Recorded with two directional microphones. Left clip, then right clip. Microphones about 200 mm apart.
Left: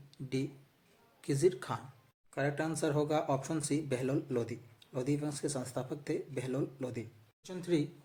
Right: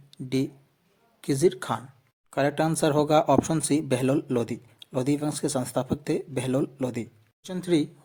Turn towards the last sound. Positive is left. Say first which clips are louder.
# right 8 dB
turn(degrees=-40)  # may be behind; listen again after turning